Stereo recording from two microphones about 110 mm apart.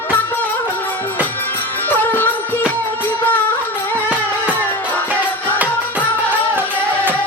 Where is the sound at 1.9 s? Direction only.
15° left (ahead or behind).